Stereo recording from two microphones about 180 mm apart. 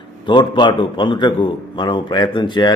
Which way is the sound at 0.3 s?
25° left (ahead or behind).